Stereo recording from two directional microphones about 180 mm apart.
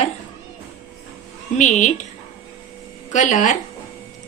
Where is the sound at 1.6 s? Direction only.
40° left (ahead or behind).